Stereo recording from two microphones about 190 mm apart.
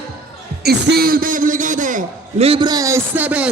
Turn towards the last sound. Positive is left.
turn(degrees=-10)  # may be behind; listen again after turning